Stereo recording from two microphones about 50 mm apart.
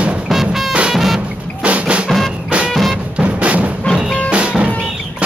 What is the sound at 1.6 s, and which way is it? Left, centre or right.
Drum, right.